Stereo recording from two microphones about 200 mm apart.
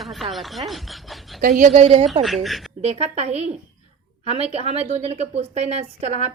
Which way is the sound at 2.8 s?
30° right (ahead or behind).